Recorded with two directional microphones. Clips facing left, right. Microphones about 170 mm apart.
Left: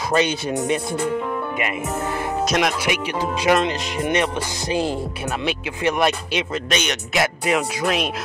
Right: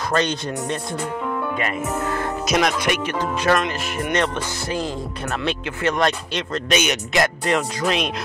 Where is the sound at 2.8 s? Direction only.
10° left (ahead or behind).